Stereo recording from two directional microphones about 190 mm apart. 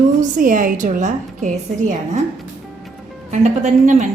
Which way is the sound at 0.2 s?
45° right (ahead or behind).